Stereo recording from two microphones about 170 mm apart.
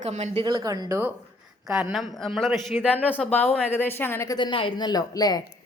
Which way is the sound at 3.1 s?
10° left (ahead or behind).